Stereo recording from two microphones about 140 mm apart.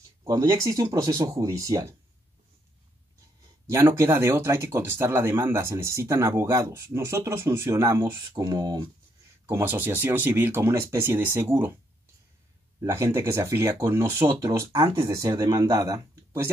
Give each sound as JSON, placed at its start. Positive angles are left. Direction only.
{"t": 0.2, "sound": "speech", "side_deg": -20}
{"t": 3.7, "sound": "speech", "side_deg": -20}
{"t": 9.5, "sound": "speech", "side_deg": -15}
{"t": 12.8, "sound": "speech", "side_deg": -20}